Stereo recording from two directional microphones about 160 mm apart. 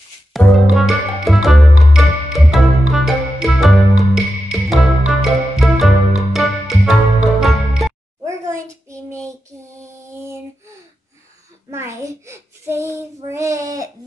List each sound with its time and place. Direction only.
0.3 s music: centre (ahead or behind)
9.8 s lullaby: 15° right (ahead or behind)
11.7 s a sound: 15° right (ahead or behind)